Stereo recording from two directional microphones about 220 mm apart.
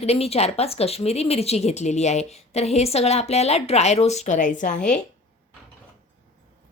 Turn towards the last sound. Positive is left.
turn(degrees=35)  # may be behind; listen again after turning